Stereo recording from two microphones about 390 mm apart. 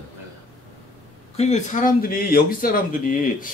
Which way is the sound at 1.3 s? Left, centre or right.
Centre.